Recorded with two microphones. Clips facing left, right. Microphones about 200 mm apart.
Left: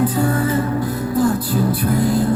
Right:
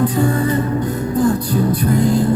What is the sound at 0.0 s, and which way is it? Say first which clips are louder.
Music: right 1 dB; 5° left (ahead or behind).